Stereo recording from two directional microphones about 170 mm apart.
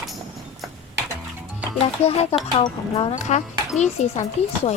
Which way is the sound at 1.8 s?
35° left (ahead or behind).